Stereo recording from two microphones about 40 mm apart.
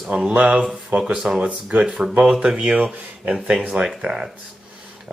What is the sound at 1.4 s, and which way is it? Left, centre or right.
Speech, right.